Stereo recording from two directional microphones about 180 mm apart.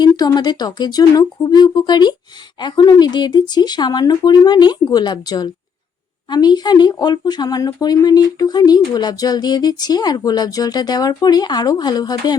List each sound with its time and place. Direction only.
0.0 s speech: 20° left (ahead or behind)